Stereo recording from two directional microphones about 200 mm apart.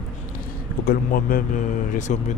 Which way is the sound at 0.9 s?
45° left (ahead or behind).